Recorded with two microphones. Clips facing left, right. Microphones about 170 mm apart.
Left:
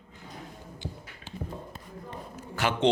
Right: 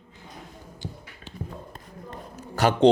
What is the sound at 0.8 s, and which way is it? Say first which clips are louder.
Music: right 2 dB; 40° right (ahead or behind).